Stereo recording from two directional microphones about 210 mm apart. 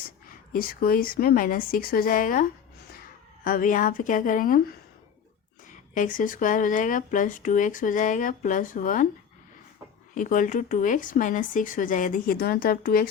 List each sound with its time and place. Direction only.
0.3 s a woman's voice: 45° left (ahead or behind)
5.9 s speech: 40° left (ahead or behind)
10.2 s speech: 40° left (ahead or behind)